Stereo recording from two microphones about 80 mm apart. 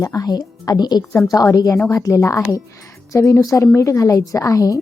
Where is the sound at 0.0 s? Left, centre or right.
Left.